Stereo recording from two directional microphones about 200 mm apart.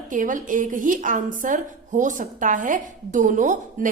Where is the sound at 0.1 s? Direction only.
40° right (ahead or behind).